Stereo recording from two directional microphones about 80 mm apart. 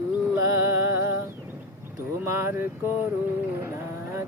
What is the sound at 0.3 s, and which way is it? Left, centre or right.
Music, right.